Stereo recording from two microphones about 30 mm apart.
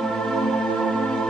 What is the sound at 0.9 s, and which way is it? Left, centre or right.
Music, left.